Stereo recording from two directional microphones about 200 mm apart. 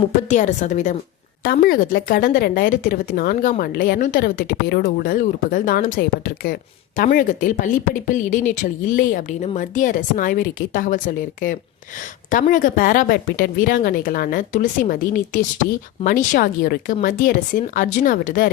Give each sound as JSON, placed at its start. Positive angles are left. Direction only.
{"t": 0.3, "sound": "a woman's voice", "side_deg": 35}
{"t": 1.5, "sound": "speech", "side_deg": 50}
{"t": 6.0, "sound": "speech", "side_deg": 50}